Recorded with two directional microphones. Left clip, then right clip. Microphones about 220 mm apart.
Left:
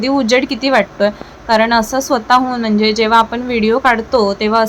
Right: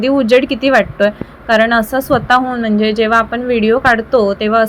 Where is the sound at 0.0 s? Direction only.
Centre (ahead or behind).